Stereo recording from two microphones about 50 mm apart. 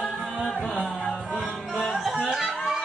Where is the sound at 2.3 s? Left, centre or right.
Centre.